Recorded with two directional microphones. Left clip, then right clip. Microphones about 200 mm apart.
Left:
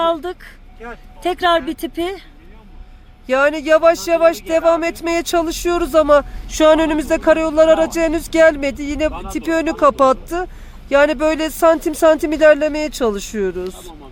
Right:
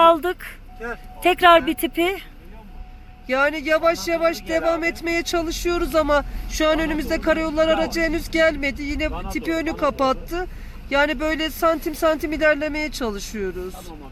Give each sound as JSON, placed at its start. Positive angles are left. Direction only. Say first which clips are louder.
{"t": 0.0, "sound": "speech", "louder": "right 3 dB", "side_deg": 0}
{"t": 3.2, "sound": "speech", "louder": "left 6 dB", "side_deg": 70}